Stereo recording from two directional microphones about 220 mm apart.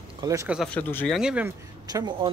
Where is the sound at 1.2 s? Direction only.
5° right (ahead or behind).